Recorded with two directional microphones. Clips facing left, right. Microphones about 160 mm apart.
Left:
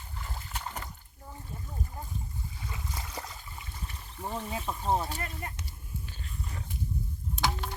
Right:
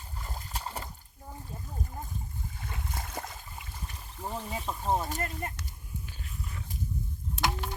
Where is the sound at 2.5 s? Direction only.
50° right (ahead or behind).